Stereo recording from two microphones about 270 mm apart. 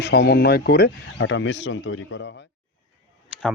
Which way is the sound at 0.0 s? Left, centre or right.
Left.